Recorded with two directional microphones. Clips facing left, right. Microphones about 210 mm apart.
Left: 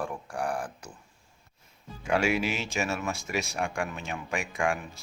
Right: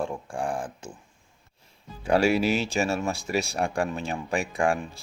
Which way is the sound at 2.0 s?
35° right (ahead or behind).